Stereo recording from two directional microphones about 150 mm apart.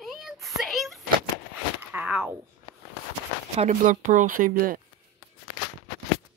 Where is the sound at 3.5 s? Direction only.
55° right (ahead or behind); by 4.8 s 70° right (ahead or behind).